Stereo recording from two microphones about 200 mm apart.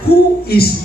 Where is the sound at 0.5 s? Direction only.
50° left (ahead or behind).